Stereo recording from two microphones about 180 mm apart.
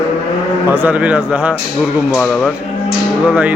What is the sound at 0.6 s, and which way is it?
Speech, 10° right (ahead or behind).